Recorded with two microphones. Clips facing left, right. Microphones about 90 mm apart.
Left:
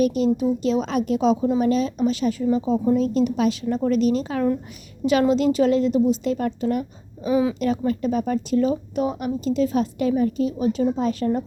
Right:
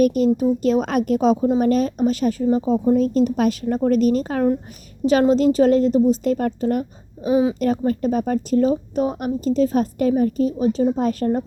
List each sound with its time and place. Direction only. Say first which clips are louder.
0.0 s a woman's voice: right 3 dB; 45° right (ahead or behind)
7.3 s a woman's voice: right 3 dB; 25° right (ahead or behind)
7.6 s a woman's voice: right 2 dB; 45° right (ahead or behind)